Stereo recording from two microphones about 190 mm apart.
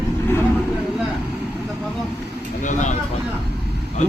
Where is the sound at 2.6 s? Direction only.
40° left (ahead or behind).